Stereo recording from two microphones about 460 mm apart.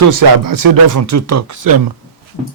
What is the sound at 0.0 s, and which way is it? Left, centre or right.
A man's voice, right.